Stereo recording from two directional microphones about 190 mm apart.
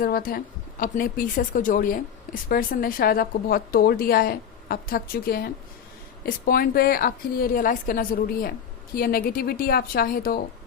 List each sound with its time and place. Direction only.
0.0 s speech: 50° left (ahead or behind)